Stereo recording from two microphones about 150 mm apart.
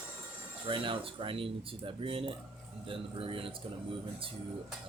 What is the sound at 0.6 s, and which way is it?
Speech, 35° right (ahead or behind).